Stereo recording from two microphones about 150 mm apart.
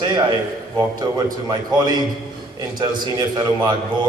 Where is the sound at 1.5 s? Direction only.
30° right (ahead or behind).